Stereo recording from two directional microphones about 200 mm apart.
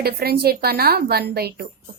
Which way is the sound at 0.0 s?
50° right (ahead or behind).